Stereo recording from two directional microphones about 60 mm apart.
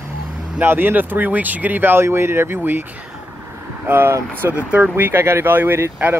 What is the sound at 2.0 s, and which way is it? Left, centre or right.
Speech, right.